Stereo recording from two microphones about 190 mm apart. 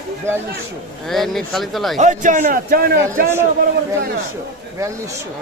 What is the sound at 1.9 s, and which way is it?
A man's voice, 40° right (ahead or behind).